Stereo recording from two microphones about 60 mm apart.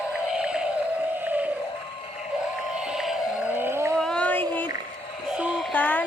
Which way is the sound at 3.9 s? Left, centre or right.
Centre.